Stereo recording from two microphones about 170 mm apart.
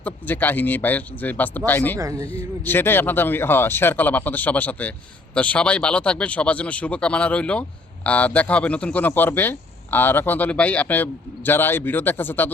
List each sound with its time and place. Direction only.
0.0 s speech: 10° left (ahead or behind)
2.0 s a man's voice: 20° right (ahead or behind)
2.6 s speech: 10° left (ahead or behind)